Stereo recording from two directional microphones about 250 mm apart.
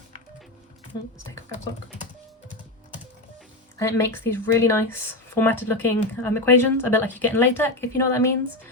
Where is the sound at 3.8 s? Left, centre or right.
Centre.